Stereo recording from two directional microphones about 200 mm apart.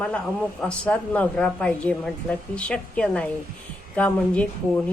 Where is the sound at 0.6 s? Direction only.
5° left (ahead or behind).